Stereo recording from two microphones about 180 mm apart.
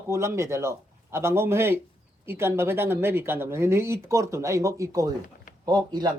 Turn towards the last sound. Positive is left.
turn(degrees=-20)  # may be behind; listen again after turning